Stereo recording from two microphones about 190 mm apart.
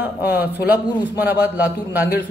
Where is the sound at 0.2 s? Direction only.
55° left (ahead or behind).